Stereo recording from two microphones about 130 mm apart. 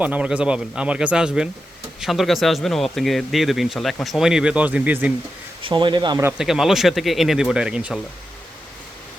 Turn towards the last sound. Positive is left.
turn(degrees=-5)  # may be behind; listen again after turning